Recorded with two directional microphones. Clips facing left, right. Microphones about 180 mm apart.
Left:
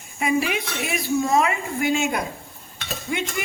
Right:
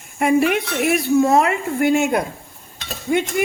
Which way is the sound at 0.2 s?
60° right (ahead or behind).